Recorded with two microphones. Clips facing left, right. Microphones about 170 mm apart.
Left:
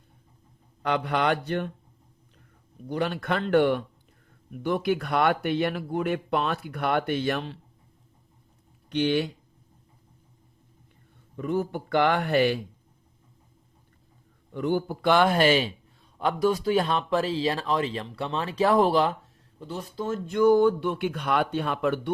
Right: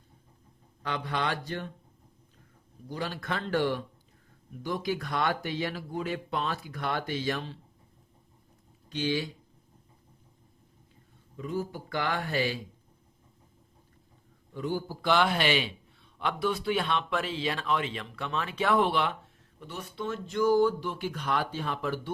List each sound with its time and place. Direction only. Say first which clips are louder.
0.8 s speech: left 7 dB; 65° left (ahead or behind)
2.9 s speech: left 7 dB; 65° left (ahead or behind)
8.9 s speech: left 6 dB; 60° left (ahead or behind)
11.3 s speech: left 6 dB; 60° left (ahead or behind)
14.5 s a man's voice: left 6 dB; 65° left (ahead or behind); by 20.1 s 35° left (ahead or behind)
20.2 s speech: left 5 dB; 60° left (ahead or behind)